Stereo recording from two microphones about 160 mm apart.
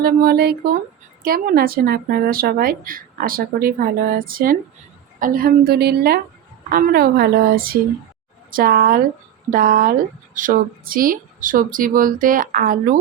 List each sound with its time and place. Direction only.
0.0 s a woman's voice: 75° right (ahead or behind)
1.2 s a woman's voice: 65° right (ahead or behind)